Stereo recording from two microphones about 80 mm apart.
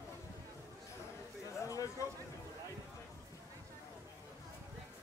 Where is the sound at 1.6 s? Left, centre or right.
Left.